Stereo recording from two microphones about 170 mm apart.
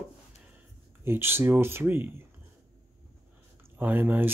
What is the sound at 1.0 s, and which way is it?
Speech, 15° right (ahead or behind).